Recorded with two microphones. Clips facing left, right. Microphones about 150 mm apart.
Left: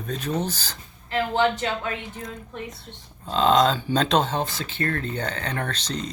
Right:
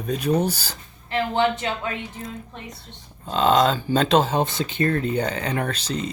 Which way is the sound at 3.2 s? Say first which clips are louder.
Right 1 dB; centre (ahead or behind).